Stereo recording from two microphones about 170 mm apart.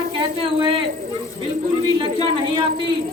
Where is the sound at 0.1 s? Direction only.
30° right (ahead or behind).